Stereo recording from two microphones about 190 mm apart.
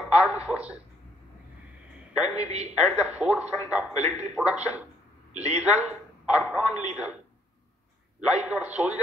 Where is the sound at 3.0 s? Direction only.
5° right (ahead or behind).